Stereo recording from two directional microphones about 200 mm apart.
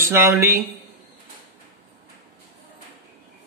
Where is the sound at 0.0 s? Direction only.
15° right (ahead or behind).